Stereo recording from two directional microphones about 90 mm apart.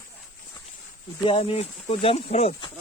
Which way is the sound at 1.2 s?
90° left.